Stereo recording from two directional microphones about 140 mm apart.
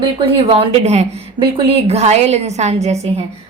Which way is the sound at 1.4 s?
40° right (ahead or behind).